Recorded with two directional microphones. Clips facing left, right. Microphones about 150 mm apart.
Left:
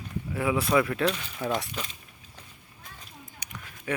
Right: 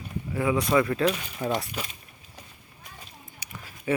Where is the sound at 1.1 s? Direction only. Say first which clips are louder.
Right 2 dB; 10° right (ahead or behind).